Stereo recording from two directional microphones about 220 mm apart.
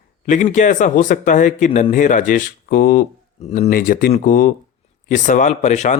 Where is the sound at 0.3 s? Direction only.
35° left (ahead or behind).